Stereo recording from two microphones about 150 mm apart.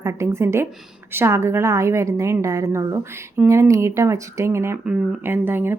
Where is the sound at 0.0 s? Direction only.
20° right (ahead or behind).